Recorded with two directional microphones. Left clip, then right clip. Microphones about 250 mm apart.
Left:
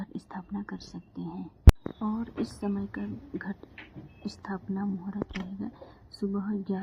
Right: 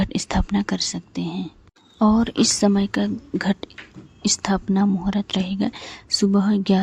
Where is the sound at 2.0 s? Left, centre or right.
Right.